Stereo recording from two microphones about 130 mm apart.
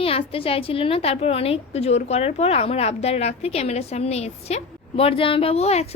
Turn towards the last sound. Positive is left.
turn(degrees=55)  # may be behind; listen again after turning